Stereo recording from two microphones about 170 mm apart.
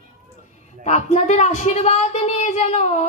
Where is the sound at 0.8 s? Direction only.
40° left (ahead or behind).